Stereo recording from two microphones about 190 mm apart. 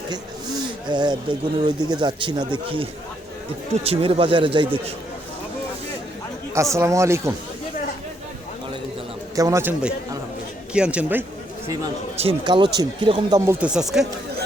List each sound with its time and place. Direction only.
0.9 s speech: 25° right (ahead or behind)
6.7 s speech: 15° right (ahead or behind)
9.3 s speech: 15° right (ahead or behind)
12.1 s speech: 30° right (ahead or behind)
13.6 s speech: 5° right (ahead or behind)